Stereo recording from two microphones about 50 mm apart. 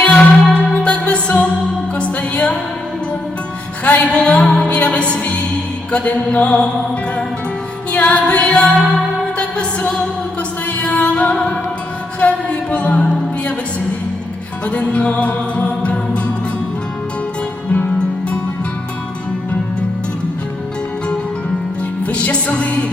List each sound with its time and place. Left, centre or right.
0.0 s music: left
3.8 s music: left
7.9 s music: left
14.7 s music: left
22.1 s music: left